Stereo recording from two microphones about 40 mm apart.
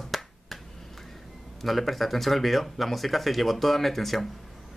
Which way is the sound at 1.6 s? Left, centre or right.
Centre.